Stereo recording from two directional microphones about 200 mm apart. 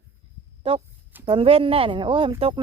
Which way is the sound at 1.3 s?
25° right (ahead or behind).